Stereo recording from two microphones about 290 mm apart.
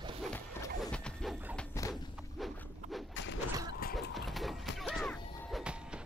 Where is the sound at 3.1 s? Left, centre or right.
Left.